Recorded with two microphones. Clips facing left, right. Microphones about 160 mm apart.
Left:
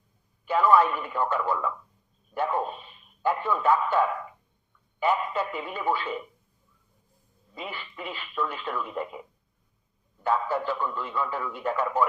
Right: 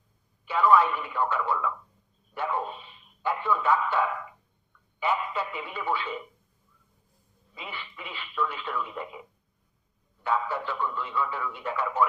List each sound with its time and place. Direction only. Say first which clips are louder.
0.4 s a man's voice: left 1 dB; 45° left (ahead or behind)
7.5 s speech: left 3 dB; 45° left (ahead or behind)
10.2 s speech: left 3 dB; 40° left (ahead or behind)